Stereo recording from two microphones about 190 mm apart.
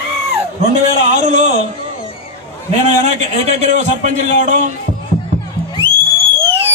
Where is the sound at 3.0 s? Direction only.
35° right (ahead or behind).